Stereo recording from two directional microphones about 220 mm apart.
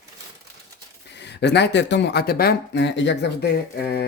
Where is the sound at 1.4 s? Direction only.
50° left (ahead or behind).